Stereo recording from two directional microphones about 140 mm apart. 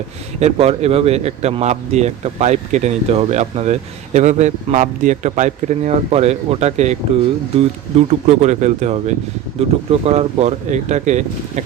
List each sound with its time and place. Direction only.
0.3 s speech: 50° right (ahead or behind)